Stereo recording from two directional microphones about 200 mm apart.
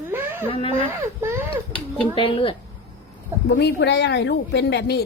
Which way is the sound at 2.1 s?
25° left (ahead or behind).